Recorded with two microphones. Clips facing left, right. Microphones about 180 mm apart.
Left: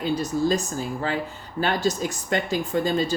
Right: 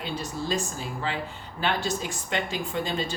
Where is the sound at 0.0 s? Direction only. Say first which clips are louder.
Left 9 dB; 40° left (ahead or behind).